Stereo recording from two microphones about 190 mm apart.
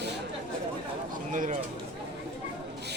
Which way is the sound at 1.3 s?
45° right (ahead or behind).